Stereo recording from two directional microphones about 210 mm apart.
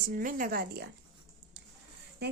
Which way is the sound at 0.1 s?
40° right (ahead or behind).